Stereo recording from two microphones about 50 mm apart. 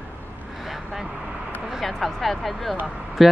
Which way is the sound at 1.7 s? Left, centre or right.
Centre.